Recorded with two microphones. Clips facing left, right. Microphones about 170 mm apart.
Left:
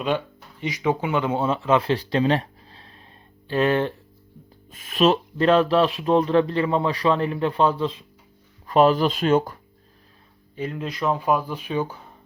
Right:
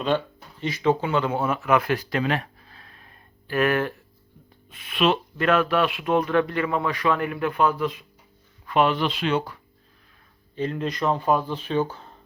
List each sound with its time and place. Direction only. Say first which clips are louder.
0.6 s speech: right 1 dB; 15° left (ahead or behind)
4.7 s speech: left 3 dB; 40° left (ahead or behind)
8.6 s speech: left 4 dB; 35° left (ahead or behind)
10.5 s speech: right 2 dB; 5° left (ahead or behind)